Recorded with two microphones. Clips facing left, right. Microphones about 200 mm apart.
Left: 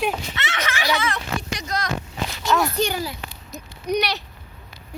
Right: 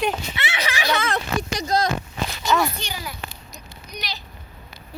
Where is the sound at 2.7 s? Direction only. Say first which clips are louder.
Left 11 dB; 50° left (ahead or behind).